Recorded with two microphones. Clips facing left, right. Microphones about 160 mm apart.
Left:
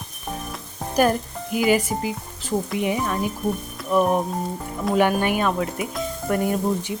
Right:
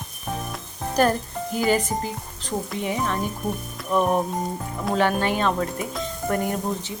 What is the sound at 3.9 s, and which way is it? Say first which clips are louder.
Frying: left 2 dB; centre (ahead or behind).